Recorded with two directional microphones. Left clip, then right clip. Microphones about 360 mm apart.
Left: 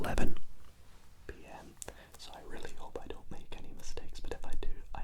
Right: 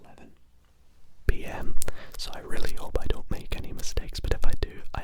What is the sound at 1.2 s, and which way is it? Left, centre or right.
Whispering, right.